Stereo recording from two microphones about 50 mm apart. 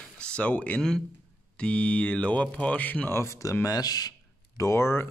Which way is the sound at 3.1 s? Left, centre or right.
Left.